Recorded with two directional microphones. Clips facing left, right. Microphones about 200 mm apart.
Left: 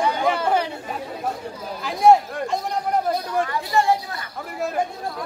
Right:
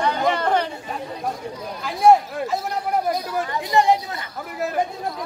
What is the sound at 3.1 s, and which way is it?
Chatter, 15° right (ahead or behind).